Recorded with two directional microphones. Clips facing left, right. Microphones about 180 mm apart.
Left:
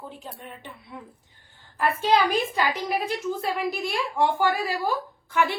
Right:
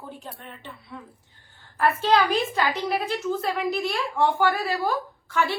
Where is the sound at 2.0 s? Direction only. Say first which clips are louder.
Left 1 dB; 10° left (ahead or behind).